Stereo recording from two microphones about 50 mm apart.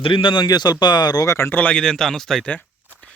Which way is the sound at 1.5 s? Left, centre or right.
Left.